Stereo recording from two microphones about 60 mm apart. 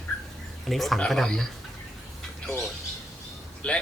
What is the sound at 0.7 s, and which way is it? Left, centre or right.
Speech, centre.